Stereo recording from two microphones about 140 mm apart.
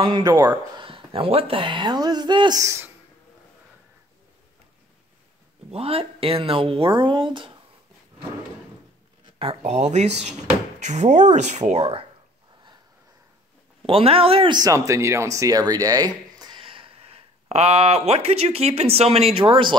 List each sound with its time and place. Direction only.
0.0 s speech: 30° right (ahead or behind)
0.7 s speech: 40° right (ahead or behind); by 2.9 s 20° right (ahead or behind)
5.7 s speech: 45° right (ahead or behind)
9.2 s speech: 40° right (ahead or behind)
13.8 s speech: 40° right (ahead or behind)